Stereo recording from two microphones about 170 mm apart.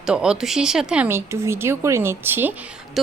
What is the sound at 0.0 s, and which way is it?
A woman's voice, 5° right (ahead or behind).